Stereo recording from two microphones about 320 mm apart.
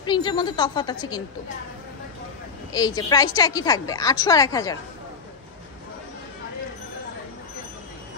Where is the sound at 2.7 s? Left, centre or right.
Centre.